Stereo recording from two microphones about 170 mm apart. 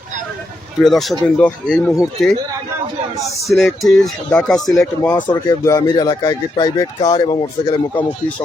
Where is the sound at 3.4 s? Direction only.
Centre (ahead or behind).